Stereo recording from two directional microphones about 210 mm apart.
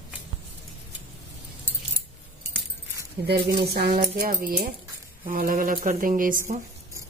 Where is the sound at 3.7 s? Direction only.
45° right (ahead or behind).